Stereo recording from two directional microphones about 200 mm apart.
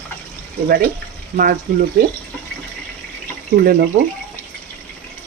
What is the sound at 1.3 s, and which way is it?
Speech, 45° right (ahead or behind).